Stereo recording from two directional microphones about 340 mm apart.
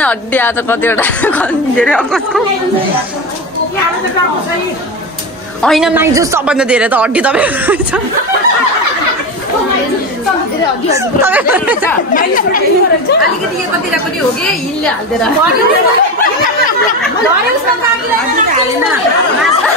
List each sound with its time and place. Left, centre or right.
0.0 s a woman's voice: centre
5.6 s a woman's voice: centre
10.9 s a woman's voice: centre
12.1 s speech: left